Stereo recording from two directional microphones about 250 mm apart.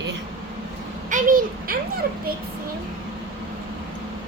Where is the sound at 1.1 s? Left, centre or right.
Right.